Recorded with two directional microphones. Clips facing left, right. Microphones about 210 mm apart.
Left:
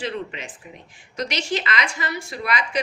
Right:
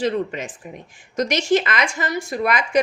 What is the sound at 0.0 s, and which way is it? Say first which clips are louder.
Speech: right 7 dB; 45° right (ahead or behind).